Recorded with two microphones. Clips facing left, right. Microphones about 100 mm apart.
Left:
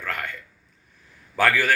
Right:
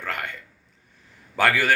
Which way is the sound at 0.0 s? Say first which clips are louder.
Even; 20° right (ahead or behind).